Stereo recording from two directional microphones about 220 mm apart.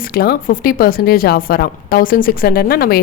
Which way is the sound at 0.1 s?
40° left (ahead or behind).